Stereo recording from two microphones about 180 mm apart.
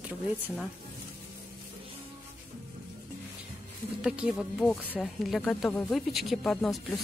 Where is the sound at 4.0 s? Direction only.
5° right (ahead or behind).